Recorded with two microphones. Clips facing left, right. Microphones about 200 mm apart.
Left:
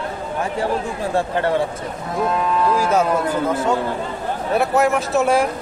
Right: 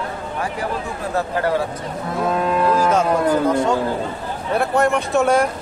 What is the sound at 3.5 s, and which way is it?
Speech, 5° left (ahead or behind).